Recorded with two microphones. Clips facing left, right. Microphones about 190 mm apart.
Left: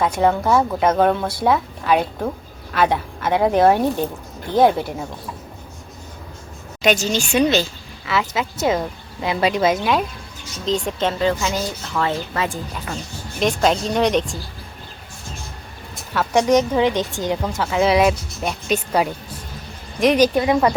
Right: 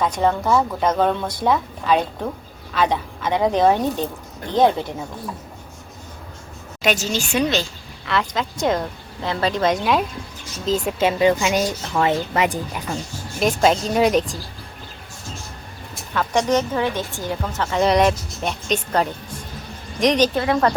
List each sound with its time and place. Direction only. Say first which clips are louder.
0.0 s a woman's voice: left 2 dB; 10° left (ahead or behind)
6.8 s speech: left 3 dB; 5° right (ahead or behind)
13.4 s speech: right 1 dB; centre (ahead or behind)
16.1 s a woman's voice: left 3 dB; 10° left (ahead or behind)